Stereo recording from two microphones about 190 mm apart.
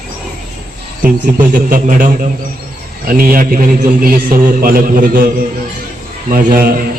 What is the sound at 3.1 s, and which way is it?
A man's voice, 50° right (ahead or behind).